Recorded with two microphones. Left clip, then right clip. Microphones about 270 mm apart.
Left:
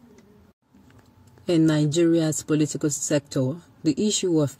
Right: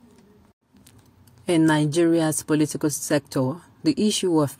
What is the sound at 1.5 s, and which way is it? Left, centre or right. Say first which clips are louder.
Speech: right 1 dB; centre.